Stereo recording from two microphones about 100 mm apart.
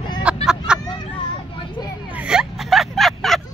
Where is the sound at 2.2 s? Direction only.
5° right (ahead or behind).